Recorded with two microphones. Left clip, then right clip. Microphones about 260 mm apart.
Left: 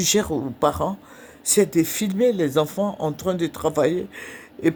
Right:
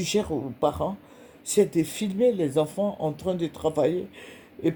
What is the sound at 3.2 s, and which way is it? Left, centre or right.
Speech, left.